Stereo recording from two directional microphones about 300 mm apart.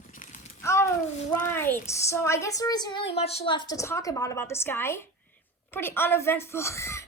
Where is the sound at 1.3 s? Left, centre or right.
Centre.